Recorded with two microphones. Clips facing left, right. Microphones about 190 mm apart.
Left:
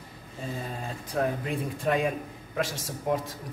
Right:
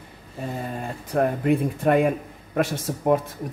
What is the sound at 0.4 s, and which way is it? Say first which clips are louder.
Speech: right 5 dB; 60° right (ahead or behind).